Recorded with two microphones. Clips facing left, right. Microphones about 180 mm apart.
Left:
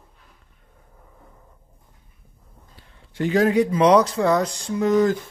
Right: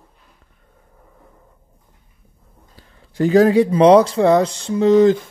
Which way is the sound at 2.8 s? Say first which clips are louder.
Right 7 dB; 40° right (ahead or behind).